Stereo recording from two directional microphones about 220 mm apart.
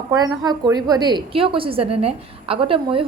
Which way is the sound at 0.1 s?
20° right (ahead or behind).